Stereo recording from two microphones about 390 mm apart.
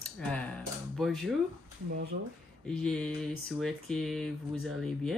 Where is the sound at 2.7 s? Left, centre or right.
Centre.